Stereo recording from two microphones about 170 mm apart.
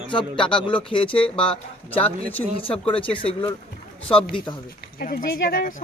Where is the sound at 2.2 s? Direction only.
10° left (ahead or behind).